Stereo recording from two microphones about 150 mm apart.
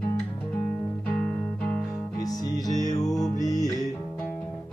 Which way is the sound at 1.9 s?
20° left (ahead or behind).